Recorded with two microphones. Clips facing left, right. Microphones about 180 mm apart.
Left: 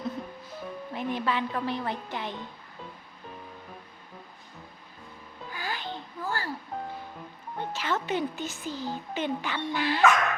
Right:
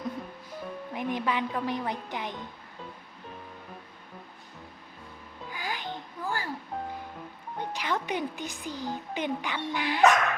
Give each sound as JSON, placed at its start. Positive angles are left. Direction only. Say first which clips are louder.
{"t": 0.5, "sound": "music", "louder": "even", "side_deg": -15}
{"t": 1.5, "sound": "speech", "louder": "even", "side_deg": -15}
{"t": 5.5, "sound": "music", "louder": "even", "side_deg": -15}
{"t": 6.7, "sound": "speech", "louder": "right 1 dB", "side_deg": 0}
{"t": 7.6, "sound": "speech", "louder": "left 1 dB", "side_deg": -15}